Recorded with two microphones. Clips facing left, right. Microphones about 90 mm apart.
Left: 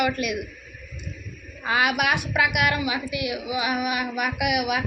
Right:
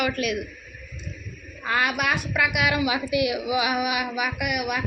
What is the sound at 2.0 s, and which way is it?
Speech, 65° left (ahead or behind).